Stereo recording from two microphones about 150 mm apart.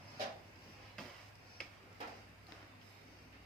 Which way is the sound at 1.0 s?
5° left (ahead or behind).